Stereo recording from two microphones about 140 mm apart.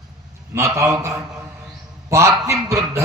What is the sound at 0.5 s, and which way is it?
Speech, 20° right (ahead or behind).